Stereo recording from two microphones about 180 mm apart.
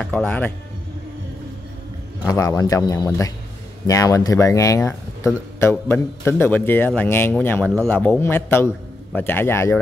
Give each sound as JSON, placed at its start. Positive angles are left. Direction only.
{"t": 0.0, "sound": "speech", "side_deg": 5}
{"t": 2.2, "sound": "a man's voice", "side_deg": 20}